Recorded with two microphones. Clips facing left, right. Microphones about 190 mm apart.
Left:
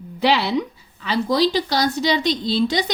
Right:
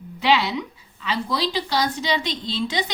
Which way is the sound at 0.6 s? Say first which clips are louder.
Left 7 dB; 45° left (ahead or behind).